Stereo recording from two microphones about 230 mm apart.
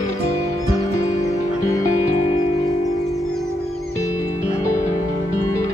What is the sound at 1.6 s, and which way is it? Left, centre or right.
Music, left.